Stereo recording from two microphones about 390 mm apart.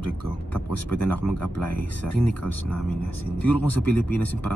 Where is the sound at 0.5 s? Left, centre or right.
Centre.